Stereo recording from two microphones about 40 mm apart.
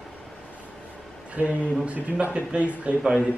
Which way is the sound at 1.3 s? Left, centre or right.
Right.